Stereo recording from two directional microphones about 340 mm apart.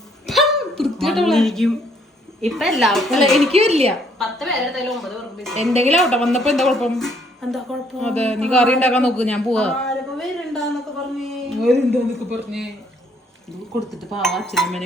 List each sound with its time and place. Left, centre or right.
0.3 s a sound: centre
2.4 s a woman's voice: centre
3.5 s a woman's voice: centre
4.2 s a woman's voice: centre
13.9 s a woman's voice: centre